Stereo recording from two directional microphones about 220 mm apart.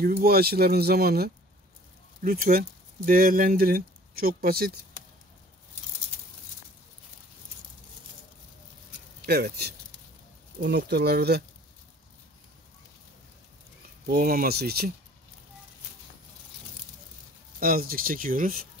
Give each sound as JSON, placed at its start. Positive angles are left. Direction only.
{"t": 0.2, "sound": "speech", "side_deg": -45}
{"t": 9.2, "sound": "speech", "side_deg": -45}
{"t": 14.0, "sound": "speech", "side_deg": -40}
{"t": 17.6, "sound": "speech", "side_deg": -40}